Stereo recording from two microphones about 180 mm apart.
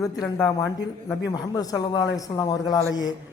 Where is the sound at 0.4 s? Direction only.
20° left (ahead or behind).